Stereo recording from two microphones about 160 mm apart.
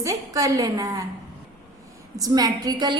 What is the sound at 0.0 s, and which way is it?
A woman's voice, 20° right (ahead or behind).